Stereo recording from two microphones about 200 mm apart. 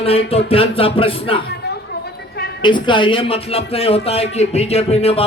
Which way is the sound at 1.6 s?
55° left (ahead or behind).